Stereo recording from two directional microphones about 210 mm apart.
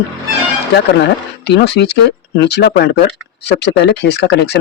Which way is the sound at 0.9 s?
55° left (ahead or behind).